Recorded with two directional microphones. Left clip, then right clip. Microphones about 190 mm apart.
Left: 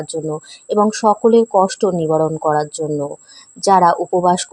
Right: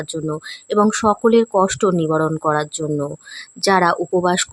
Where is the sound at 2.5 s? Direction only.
5° right (ahead or behind).